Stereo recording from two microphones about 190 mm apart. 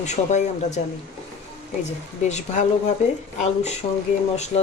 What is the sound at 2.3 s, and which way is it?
Speech, 35° left (ahead or behind).